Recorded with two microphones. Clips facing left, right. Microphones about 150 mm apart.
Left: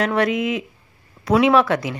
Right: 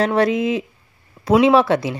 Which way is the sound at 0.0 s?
30° right (ahead or behind).